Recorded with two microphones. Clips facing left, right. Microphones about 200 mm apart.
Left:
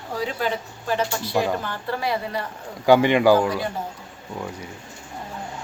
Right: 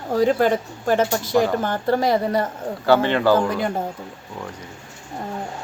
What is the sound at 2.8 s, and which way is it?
Speech, 15° left (ahead or behind).